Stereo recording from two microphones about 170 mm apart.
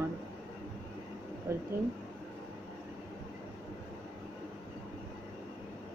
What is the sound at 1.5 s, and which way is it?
Speech, 15° right (ahead or behind).